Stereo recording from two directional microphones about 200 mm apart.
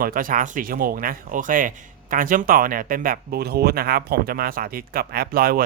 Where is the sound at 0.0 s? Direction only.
45° right (ahead or behind).